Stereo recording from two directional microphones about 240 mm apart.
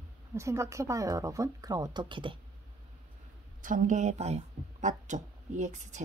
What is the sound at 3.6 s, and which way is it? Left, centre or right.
A woman's voice, right.